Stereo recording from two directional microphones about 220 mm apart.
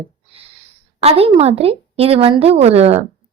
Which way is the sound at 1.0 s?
25° right (ahead or behind).